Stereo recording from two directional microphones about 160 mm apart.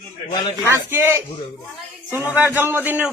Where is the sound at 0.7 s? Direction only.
15° right (ahead or behind).